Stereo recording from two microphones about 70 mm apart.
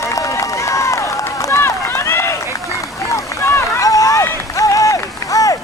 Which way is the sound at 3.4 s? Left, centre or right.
Left.